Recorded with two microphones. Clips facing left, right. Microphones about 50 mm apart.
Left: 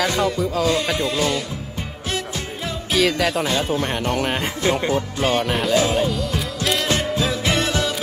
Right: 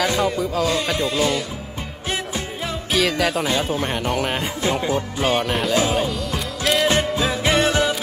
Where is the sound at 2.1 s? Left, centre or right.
Centre.